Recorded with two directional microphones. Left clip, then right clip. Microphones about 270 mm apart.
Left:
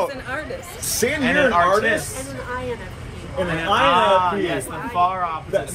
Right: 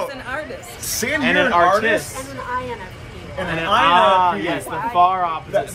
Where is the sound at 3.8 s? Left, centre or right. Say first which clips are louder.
Right 3 dB; right.